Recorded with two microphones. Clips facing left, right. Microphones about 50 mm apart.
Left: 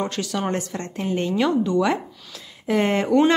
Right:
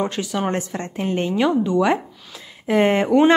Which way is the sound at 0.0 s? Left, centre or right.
Centre.